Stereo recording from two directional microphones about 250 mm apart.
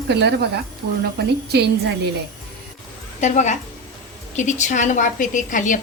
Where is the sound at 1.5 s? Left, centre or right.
Right.